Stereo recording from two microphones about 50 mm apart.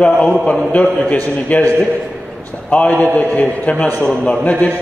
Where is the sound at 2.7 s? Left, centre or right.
Left.